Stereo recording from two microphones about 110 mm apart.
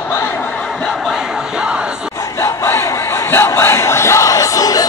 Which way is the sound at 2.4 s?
25° left (ahead or behind).